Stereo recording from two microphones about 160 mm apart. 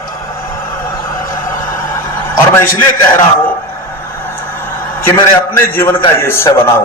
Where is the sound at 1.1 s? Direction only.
60° left (ahead or behind).